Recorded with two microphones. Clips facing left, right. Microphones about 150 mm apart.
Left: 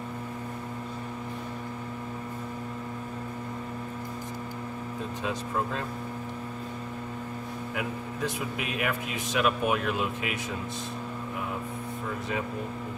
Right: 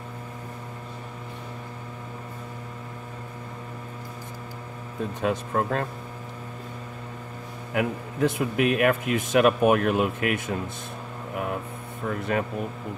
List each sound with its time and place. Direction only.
5.2 s speech: 55° right (ahead or behind)
7.7 s speech: 60° right (ahead or behind)
12.1 s speech: 60° right (ahead or behind)